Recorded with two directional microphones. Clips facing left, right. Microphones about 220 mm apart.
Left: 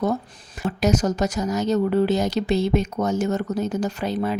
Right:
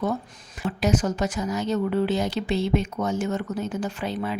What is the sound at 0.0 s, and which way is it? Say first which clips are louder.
A woman's voice: left 3 dB; 40° left (ahead or behind).